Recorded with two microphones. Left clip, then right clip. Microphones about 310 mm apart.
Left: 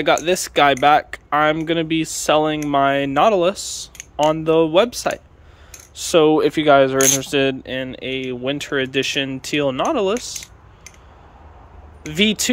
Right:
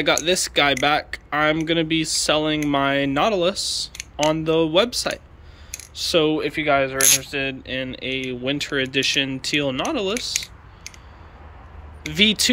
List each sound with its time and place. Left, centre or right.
0.0 s speech: centre
12.0 s speech: centre